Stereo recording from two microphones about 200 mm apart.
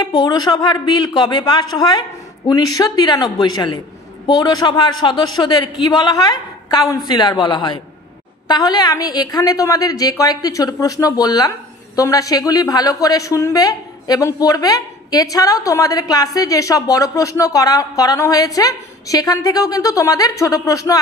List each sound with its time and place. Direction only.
0.0 s a woman's voice: 20° left (ahead or behind)